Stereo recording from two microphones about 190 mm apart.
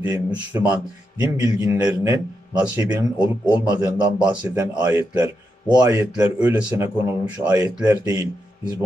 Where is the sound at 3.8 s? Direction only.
20° right (ahead or behind).